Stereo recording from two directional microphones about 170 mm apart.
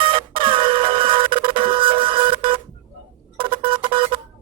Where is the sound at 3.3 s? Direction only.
30° right (ahead or behind).